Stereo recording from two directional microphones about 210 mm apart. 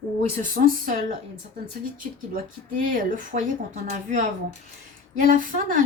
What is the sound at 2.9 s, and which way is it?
Speech, 40° right (ahead or behind).